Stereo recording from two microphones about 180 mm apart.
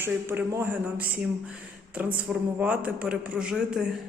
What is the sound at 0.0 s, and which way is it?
A man's voice, 10° right (ahead or behind).